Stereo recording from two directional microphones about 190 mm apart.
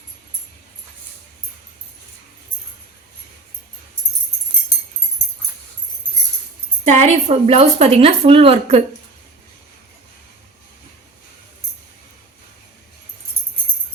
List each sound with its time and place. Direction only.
6.8 s a woman's voice: 40° right (ahead or behind)